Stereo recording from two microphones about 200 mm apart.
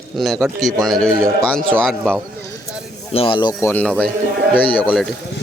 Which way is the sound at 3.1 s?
25° left (ahead or behind).